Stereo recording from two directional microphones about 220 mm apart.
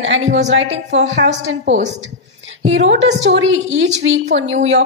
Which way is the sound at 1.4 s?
55° right (ahead or behind).